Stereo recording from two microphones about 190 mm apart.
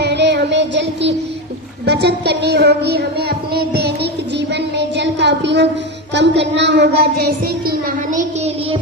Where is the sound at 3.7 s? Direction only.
60° right (ahead or behind).